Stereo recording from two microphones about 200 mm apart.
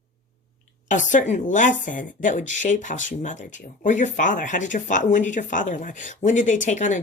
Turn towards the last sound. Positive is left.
turn(degrees=40)  # may be behind; listen again after turning